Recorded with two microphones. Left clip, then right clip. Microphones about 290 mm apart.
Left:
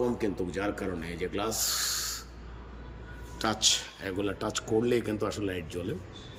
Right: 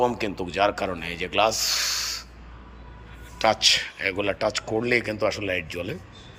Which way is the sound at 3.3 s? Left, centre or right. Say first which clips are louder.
Right 8 dB; centre.